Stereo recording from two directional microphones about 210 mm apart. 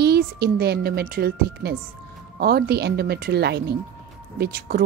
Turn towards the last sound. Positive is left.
turn(degrees=-45)  # may be behind; listen again after turning